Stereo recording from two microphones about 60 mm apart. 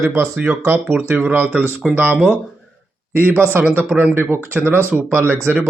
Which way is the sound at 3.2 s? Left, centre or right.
Right.